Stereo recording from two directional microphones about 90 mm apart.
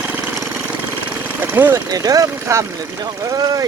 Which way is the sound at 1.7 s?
45° right (ahead or behind).